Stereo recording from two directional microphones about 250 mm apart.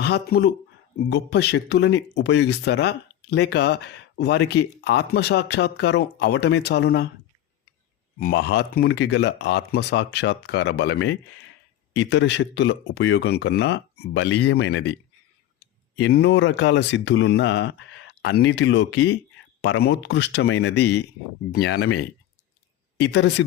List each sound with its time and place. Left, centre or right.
0.0 s speech: left
8.2 s speech: left
16.0 s speech: left